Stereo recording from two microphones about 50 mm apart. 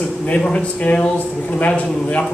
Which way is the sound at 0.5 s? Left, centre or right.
Left.